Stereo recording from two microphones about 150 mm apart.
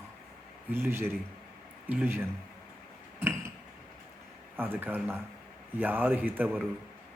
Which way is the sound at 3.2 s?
15° right (ahead or behind).